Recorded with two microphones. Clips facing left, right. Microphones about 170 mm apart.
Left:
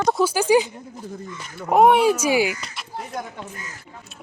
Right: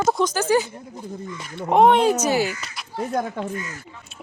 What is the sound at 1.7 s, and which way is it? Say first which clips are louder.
Speech: even; 5° left (ahead or behind).